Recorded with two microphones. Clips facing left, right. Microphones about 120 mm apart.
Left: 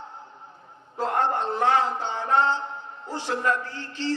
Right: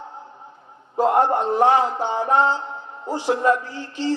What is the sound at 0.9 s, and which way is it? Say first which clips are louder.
A woman's voice: right 7 dB; 15° right (ahead or behind).